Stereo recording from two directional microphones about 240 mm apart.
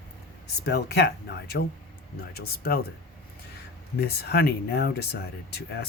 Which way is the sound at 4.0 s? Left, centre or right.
Left.